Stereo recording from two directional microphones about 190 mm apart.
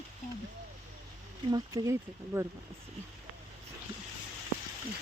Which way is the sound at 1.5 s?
20° right (ahead or behind).